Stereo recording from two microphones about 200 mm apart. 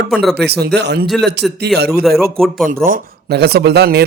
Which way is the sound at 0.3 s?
55° right (ahead or behind).